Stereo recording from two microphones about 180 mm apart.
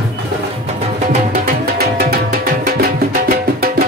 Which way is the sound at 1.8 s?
60° right (ahead or behind).